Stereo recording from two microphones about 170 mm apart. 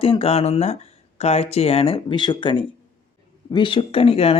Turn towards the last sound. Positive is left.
turn(degrees=35)  # may be behind; listen again after turning